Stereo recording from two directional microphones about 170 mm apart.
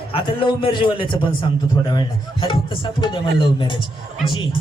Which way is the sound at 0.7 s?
30° left (ahead or behind).